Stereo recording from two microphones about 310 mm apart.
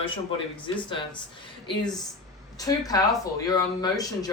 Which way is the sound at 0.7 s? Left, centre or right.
Centre.